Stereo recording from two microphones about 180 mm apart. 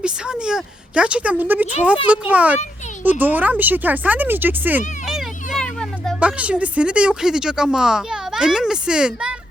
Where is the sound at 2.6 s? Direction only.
40° left (ahead or behind).